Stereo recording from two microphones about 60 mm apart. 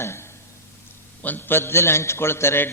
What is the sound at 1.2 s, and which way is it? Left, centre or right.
A man's voice, left.